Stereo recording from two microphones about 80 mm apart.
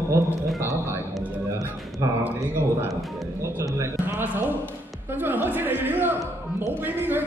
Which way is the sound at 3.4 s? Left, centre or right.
Right.